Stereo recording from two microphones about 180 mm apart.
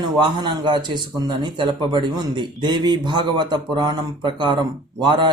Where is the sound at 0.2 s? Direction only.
25° right (ahead or behind).